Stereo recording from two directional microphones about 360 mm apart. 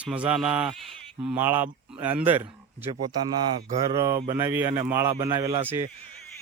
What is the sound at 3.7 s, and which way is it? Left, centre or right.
Speech, centre.